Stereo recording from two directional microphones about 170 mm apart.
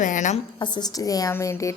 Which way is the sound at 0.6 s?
25° left (ahead or behind).